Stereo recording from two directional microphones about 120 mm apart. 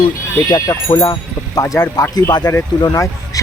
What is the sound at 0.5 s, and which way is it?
Speech, 30° left (ahead or behind).